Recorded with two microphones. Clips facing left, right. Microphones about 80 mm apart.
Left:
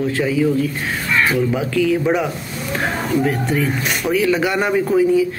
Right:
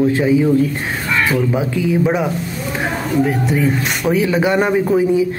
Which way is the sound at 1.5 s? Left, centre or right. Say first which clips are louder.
Even; right.